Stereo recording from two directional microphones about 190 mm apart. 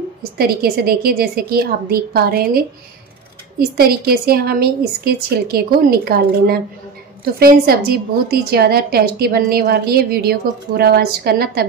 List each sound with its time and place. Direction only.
0.2 s a woman's voice: 55° right (ahead or behind)